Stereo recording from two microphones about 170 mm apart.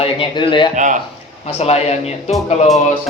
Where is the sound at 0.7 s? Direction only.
45° right (ahead or behind).